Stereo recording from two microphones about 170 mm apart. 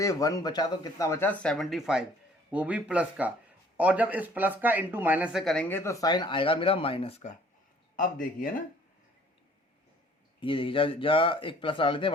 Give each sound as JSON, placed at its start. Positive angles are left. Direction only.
{"t": 0.0, "sound": "speech", "side_deg": 20}
{"t": 5.6, "sound": "speech", "side_deg": 15}
{"t": 7.9, "sound": "speech", "side_deg": 50}
{"t": 10.4, "sound": "speech", "side_deg": 30}